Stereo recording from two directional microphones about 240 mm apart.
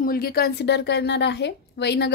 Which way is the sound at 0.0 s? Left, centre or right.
Left.